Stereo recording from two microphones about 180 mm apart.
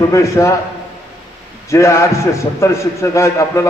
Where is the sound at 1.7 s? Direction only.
15° left (ahead or behind).